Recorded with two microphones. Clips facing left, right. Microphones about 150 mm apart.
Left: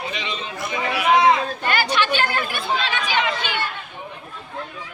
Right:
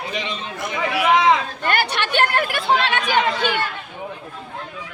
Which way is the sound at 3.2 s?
50° right (ahead or behind).